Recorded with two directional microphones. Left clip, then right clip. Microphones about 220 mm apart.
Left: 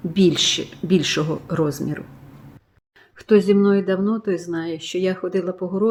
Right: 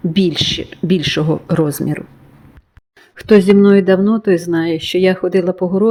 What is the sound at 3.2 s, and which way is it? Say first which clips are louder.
Speech: right 6 dB; 30° right (ahead or behind).